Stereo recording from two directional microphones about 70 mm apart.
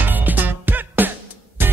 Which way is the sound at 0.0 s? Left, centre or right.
Right.